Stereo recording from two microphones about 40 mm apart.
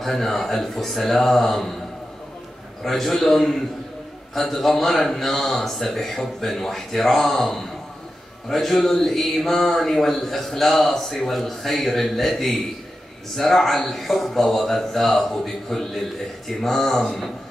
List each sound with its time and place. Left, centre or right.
0.0 s speech: centre
2.8 s speech: centre